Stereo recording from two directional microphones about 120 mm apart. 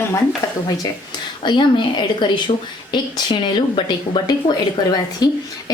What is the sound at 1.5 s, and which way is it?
A woman's voice, 40° left (ahead or behind).